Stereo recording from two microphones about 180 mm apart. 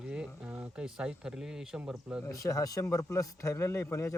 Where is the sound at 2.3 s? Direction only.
20° left (ahead or behind).